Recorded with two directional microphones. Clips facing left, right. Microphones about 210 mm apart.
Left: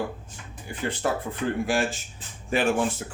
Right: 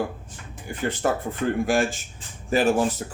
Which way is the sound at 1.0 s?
50° right (ahead or behind).